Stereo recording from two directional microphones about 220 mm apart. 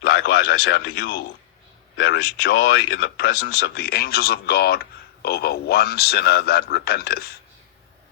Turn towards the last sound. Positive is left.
turn(degrees=45)  # may be behind; listen again after turning